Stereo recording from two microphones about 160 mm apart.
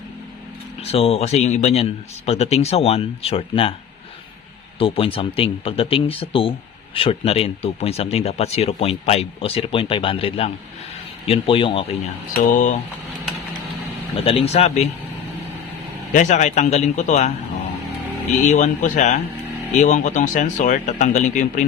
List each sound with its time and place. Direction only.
0.8 s speech: 40° left (ahead or behind)
4.8 s speech: 35° left (ahead or behind)
12.3 s speech: 55° left (ahead or behind)
14.3 s speech: 40° left (ahead or behind)
16.1 s speech: 50° left (ahead or behind)
18.4 s speech: 50° left (ahead or behind)